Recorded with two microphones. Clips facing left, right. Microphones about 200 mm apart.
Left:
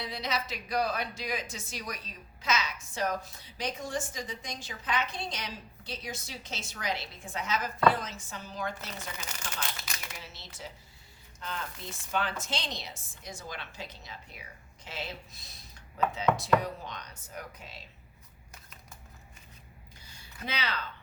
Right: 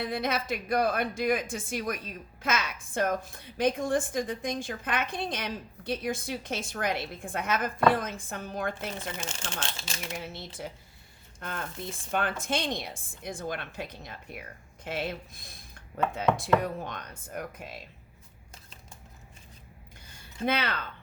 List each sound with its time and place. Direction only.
0.0 s a woman's voice: 50° right (ahead or behind)
9.2 s speech: 25° right (ahead or behind)
10.2 s a woman's voice: 55° right (ahead or behind)
20.0 s a sound: 55° right (ahead or behind)